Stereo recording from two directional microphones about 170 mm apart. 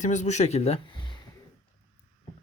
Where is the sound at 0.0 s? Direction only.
45° left (ahead or behind); by 1.2 s 30° left (ahead or behind).